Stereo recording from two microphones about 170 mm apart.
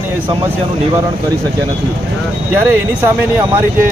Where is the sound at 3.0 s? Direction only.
10° right (ahead or behind).